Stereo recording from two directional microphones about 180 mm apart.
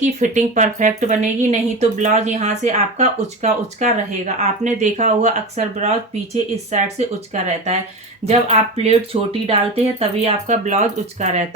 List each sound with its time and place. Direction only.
0.0 s speech: 45° right (ahead or behind)